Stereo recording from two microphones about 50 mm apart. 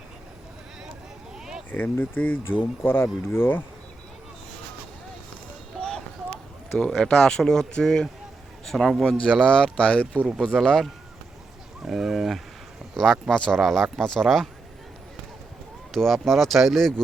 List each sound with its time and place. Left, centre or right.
1.7 s speech: left
5.7 s a sound: centre
6.7 s speech: centre
9.3 s speech: centre
10.6 s speech: centre
11.8 s speech: centre
13.0 s speech: centre
14.0 s speech: centre
15.9 s speech: centre